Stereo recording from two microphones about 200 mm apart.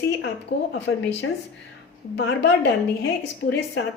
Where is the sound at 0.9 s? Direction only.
85° left.